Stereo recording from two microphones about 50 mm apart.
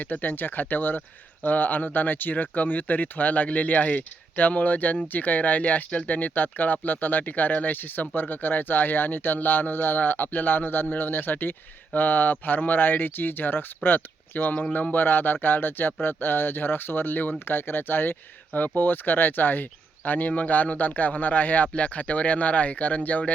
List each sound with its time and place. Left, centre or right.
0.0 s speech: left